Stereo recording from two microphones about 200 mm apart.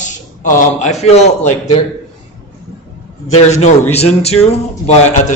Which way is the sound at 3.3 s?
35° left (ahead or behind).